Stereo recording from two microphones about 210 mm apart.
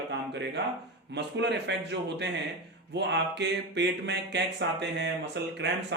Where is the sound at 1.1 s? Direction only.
55° right (ahead or behind).